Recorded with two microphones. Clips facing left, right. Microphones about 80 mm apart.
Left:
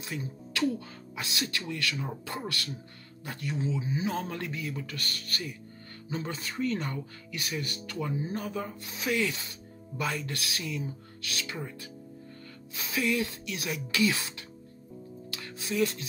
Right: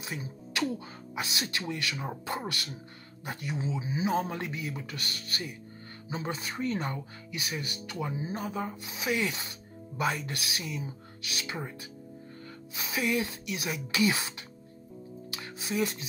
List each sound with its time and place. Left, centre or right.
0.0 s speech: centre
8.9 s rub: centre
9.2 s speech: right
12.7 s speech: right
15.3 s music: centre